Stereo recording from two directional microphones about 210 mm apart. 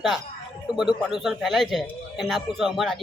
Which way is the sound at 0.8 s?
Centre (ahead or behind).